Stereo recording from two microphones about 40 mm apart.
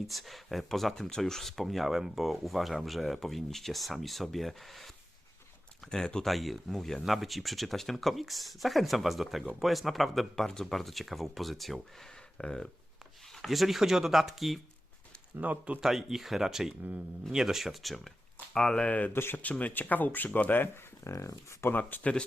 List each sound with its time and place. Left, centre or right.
0.1 s speech: centre
5.8 s speech: centre
6.2 s speech: centre
7.0 s speech: centre
12.4 s speech: left
13.3 s speech: centre
15.4 s speech: right
15.8 s speech: centre
18.9 s speech: left
19.1 s speech: left
19.4 s speech: left
21.8 s speech: left